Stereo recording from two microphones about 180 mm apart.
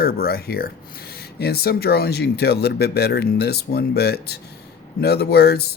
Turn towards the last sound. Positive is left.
turn(degrees=65)  # may be behind; listen again after turning